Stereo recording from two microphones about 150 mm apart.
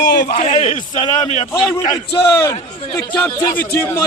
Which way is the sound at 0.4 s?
45° left (ahead or behind).